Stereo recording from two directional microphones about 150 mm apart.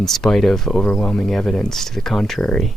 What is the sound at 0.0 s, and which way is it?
Speech, 5° left (ahead or behind).